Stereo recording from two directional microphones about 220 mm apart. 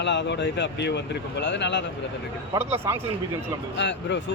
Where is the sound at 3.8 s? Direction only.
55° left (ahead or behind).